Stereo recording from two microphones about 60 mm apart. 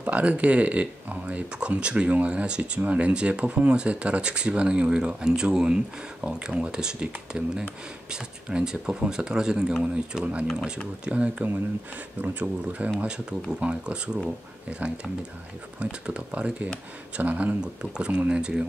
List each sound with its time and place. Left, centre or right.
0.0 s speech: right
15.8 s speech: centre
17.6 s speech: centre